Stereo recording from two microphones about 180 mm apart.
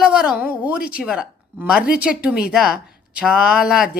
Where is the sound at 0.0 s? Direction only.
5° right (ahead or behind).